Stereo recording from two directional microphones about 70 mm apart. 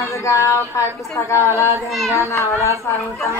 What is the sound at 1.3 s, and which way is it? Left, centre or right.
Speech, left.